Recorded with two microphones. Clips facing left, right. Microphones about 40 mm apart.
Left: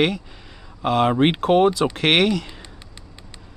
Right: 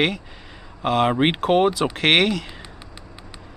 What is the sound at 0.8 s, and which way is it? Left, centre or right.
Speech, centre.